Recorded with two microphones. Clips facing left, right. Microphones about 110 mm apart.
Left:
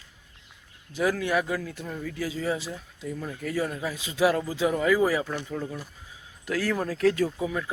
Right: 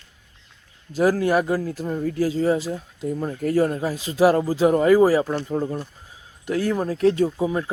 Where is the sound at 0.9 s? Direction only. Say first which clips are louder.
Right 6 dB; 40° right (ahead or behind).